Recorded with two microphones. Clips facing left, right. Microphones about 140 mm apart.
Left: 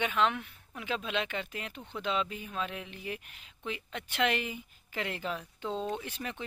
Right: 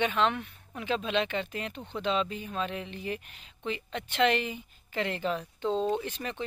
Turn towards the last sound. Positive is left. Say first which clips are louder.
# right 3 dB
turn(degrees=10)  # may be behind; listen again after turning